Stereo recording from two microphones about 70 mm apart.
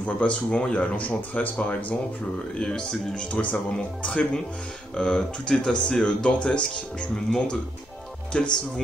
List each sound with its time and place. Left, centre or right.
0.0 s speech: centre